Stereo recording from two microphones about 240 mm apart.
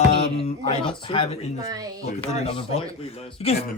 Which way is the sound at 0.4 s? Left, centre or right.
Left.